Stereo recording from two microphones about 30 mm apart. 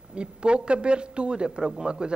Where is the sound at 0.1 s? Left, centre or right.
Right.